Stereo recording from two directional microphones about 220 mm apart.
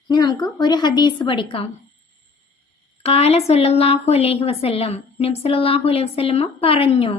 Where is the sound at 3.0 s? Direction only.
25° left (ahead or behind).